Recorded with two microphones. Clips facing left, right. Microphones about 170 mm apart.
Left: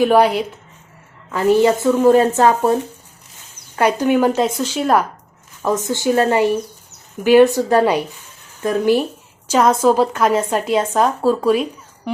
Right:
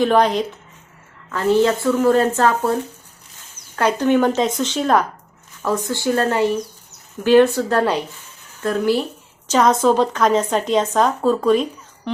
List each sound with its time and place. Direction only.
0.0 s a woman's voice: 10° left (ahead or behind)
3.8 s a woman's voice: 10° left (ahead or behind)
5.6 s a woman's voice: 20° left (ahead or behind)